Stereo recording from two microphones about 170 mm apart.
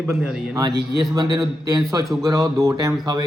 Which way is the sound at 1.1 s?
25° right (ahead or behind).